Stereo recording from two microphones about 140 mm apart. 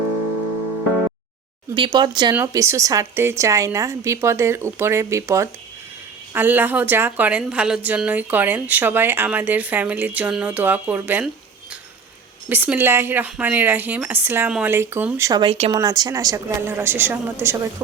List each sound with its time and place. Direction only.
1.7 s a woman's voice: 35° right (ahead or behind); by 11.3 s 15° right (ahead or behind)
12.5 s a woman's voice: 15° right (ahead or behind)
15.3 s a woman's voice: 30° right (ahead or behind); by 17.6 s 15° right (ahead or behind)